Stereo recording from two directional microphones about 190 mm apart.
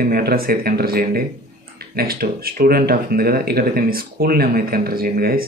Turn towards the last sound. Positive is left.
turn(degrees=-50)  # may be behind; listen again after turning